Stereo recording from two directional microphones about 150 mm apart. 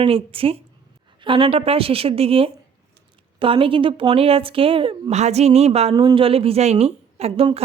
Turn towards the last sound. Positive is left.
turn(degrees=-45)  # may be behind; listen again after turning